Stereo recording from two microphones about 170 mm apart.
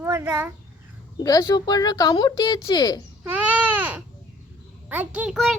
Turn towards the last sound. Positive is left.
turn(degrees=0)  # may be behind; listen again after turning